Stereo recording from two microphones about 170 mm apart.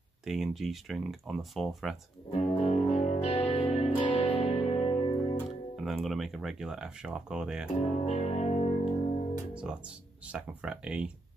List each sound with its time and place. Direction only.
0.2 s speech: centre (ahead or behind)
2.3 s music: 40° left (ahead or behind)
5.9 s speech: centre (ahead or behind)
7.8 s music: 40° left (ahead or behind)
9.5 s speech: 5° right (ahead or behind)